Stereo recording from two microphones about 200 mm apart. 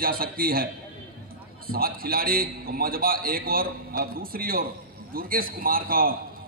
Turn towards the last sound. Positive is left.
turn(degrees=-45)  # may be behind; listen again after turning